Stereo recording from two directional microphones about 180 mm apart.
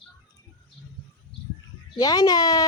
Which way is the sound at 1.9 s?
20° left (ahead or behind).